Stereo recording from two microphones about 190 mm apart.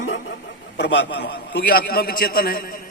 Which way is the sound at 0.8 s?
65° left (ahead or behind).